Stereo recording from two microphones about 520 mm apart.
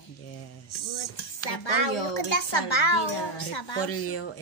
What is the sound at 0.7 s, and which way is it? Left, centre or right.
Speech, left.